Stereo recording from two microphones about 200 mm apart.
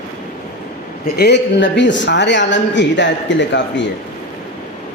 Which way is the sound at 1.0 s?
50° left (ahead or behind).